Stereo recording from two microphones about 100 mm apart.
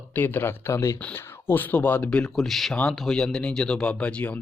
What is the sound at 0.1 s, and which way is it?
Speech, 20° left (ahead or behind).